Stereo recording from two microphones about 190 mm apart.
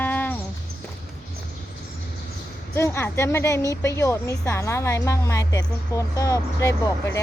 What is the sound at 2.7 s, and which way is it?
A woman's voice, 15° left (ahead or behind).